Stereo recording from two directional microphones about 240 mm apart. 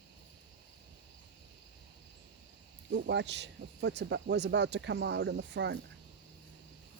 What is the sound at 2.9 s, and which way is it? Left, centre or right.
Speech, right.